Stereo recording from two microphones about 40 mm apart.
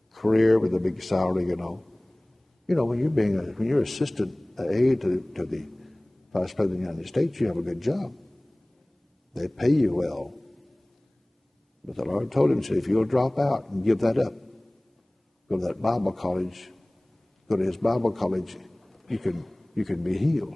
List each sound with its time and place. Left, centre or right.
0.1 s a man's voice: centre
9.3 s a man's voice: centre
11.8 s a man's voice: centre